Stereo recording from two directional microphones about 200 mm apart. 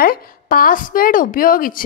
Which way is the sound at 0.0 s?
45° left (ahead or behind).